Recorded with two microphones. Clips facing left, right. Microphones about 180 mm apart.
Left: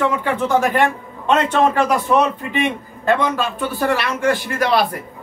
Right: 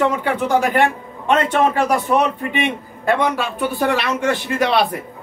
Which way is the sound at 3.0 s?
10° right (ahead or behind).